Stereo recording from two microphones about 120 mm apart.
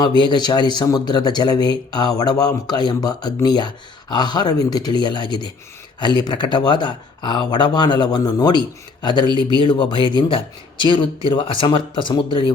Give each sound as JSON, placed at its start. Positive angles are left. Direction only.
{"t": 0.2, "sound": "speech", "side_deg": 40}